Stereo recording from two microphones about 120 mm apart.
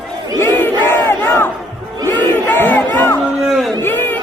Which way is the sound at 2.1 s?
15° left (ahead or behind).